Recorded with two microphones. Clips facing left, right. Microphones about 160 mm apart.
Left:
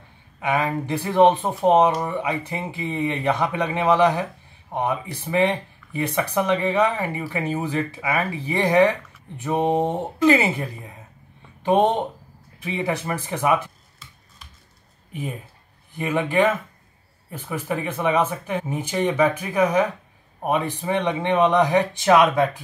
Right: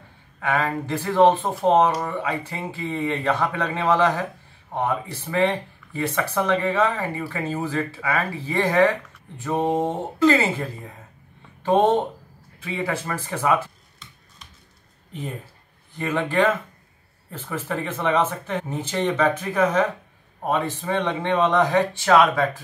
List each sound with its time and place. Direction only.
0.4 s speech: 15° left (ahead or behind)
15.9 s speech: 15° left (ahead or behind)